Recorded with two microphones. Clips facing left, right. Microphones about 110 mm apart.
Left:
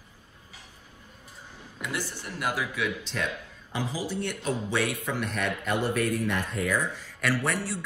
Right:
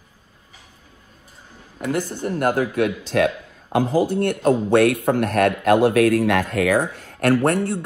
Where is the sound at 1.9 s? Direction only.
50° right (ahead or behind).